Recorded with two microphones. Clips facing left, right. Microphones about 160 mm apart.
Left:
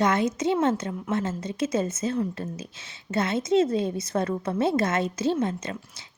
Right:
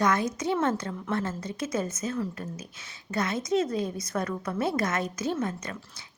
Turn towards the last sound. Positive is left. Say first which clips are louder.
# left 4 dB
turn(degrees=25)  # may be behind; listen again after turning